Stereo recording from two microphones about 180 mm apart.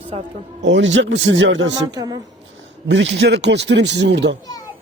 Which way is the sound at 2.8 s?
80° right.